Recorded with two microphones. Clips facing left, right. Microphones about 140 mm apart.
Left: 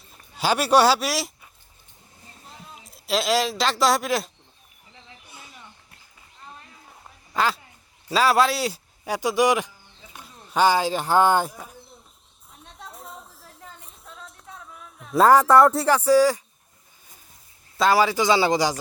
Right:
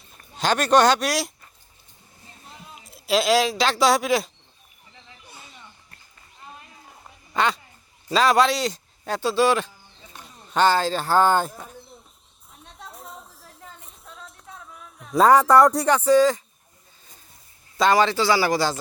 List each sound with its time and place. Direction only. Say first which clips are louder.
0.1 s speech: even; 10° left (ahead or behind)
2.5 s speech: right 1 dB; centre (ahead or behind)
7.3 s speech: right 1 dB; centre (ahead or behind)
11.5 s a sound: right 1 dB; centre (ahead or behind)
17.7 s speech: right 1 dB; 5° left (ahead or behind)